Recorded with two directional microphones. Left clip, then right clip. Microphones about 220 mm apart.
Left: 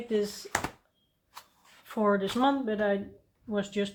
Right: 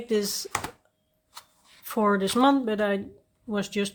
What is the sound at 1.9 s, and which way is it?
Speech, 45° right (ahead or behind).